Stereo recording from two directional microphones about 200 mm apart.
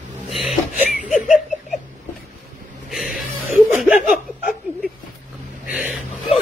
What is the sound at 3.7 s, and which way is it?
Laughter, 5° right (ahead or behind).